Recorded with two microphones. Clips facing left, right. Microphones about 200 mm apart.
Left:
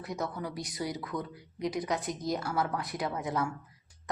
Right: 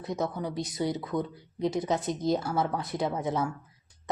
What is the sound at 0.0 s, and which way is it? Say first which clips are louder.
A woman's voice: right 4 dB; 20° right (ahead or behind).